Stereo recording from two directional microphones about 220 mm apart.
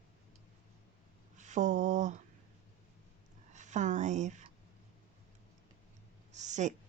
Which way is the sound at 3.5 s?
35° right (ahead or behind).